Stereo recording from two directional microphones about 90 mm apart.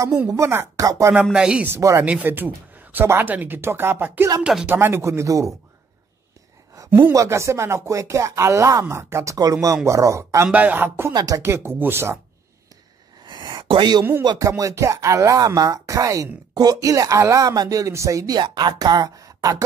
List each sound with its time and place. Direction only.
0.7 s speech: 40° right (ahead or behind)
1.3 s speech: 10° right (ahead or behind)
1.8 s speech: 40° right (ahead or behind)
2.0 s speech: 20° right (ahead or behind)
4.4 s speech: 10° right (ahead or behind)
4.6 s speech: 25° right (ahead or behind)
6.9 s speech: 25° right (ahead or behind)
10.5 s speech: 20° right (ahead or behind)
11.1 s speech: 40° right (ahead or behind)
13.3 s a sound: 55° right (ahead or behind)
14.2 s speech: 55° right (ahead or behind)
14.6 s speech: 35° right (ahead or behind)
18.4 s speech: 55° right (ahead or behind)